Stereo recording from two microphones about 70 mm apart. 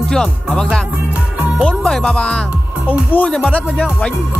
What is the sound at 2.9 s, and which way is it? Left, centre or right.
Speech, left.